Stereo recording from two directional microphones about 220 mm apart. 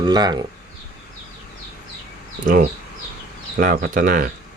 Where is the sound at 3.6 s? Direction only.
40° right (ahead or behind).